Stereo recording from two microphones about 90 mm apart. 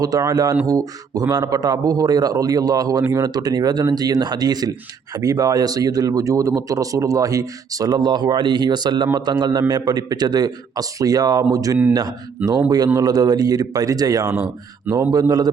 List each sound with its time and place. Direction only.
0.0 s speech: 40° right (ahead or behind)
14.3 s speech: 10° right (ahead or behind)
15.1 s speech: 45° right (ahead or behind)